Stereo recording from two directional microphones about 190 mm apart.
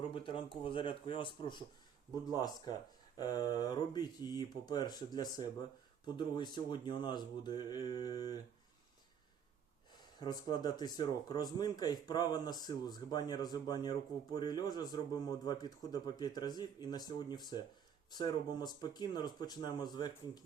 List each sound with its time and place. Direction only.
0.1 s a man's voice: 25° left (ahead or behind)
3.2 s a man's voice: 20° left (ahead or behind)
9.9 s a man's voice: 20° left (ahead or behind)